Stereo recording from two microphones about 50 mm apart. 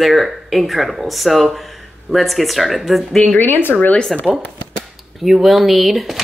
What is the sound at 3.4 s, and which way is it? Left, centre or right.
Speech, left.